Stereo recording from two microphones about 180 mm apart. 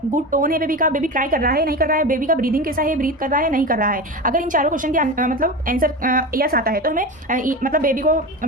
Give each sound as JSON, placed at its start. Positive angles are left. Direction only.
{"t": 0.1, "sound": "a woman's voice", "side_deg": -50}